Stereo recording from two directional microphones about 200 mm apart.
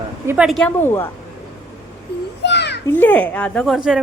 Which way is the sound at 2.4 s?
60° left (ahead or behind).